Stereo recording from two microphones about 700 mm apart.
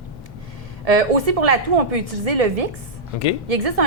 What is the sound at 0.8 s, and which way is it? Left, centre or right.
A woman's voice, right.